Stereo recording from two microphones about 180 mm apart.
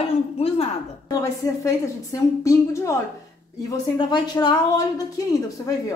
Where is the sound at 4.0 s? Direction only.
25° left (ahead or behind).